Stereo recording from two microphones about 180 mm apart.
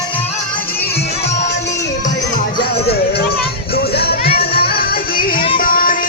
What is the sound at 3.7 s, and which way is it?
Music, 60° left (ahead or behind).